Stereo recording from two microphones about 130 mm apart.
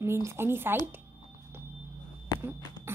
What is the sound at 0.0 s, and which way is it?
Speech, 20° right (ahead or behind).